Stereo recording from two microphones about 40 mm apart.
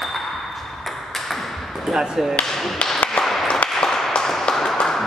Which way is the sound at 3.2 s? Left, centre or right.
Centre.